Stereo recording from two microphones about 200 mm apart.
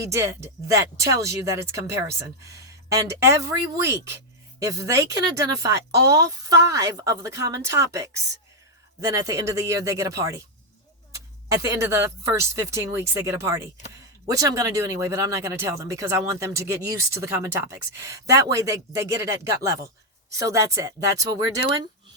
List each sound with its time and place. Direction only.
0.0 s speech: 15° right (ahead or behind)
11.6 s speech: 15° right (ahead or behind)